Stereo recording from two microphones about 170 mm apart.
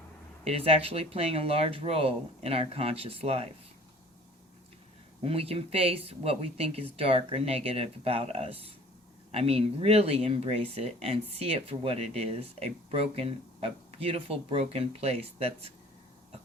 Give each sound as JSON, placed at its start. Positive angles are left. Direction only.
{"t": 0.4, "sound": "speech", "side_deg": -35}
{"t": 5.2, "sound": "speech", "side_deg": -35}